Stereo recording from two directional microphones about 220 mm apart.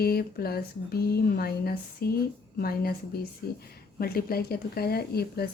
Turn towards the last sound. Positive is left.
turn(degrees=45)  # may be behind; listen again after turning